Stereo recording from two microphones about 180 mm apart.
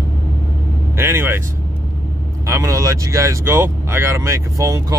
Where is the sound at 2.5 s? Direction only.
15° right (ahead or behind).